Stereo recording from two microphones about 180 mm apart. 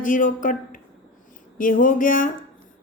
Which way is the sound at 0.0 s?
45° left (ahead or behind).